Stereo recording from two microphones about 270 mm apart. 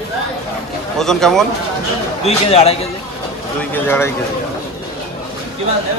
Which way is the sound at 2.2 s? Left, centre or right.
Left.